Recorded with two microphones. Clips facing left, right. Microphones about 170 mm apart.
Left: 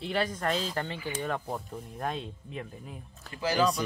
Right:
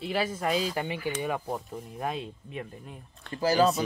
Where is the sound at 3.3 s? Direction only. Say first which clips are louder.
Right 4 dB; 40° right (ahead or behind).